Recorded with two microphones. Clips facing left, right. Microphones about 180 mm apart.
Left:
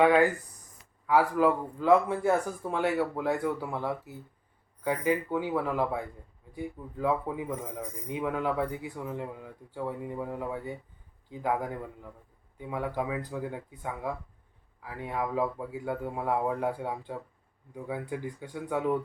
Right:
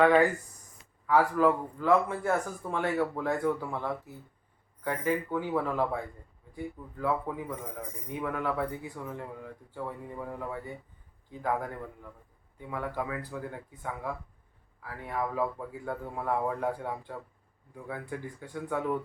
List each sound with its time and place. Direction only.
0.0 s speech: 5° left (ahead or behind)
12.5 s speech: 15° left (ahead or behind)